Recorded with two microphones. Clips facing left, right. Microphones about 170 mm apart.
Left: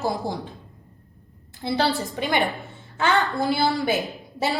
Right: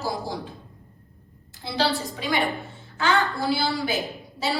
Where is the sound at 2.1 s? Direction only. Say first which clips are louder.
Left 3 dB; 65° left (ahead or behind).